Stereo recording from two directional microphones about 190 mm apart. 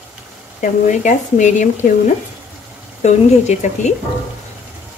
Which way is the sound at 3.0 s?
35° left (ahead or behind).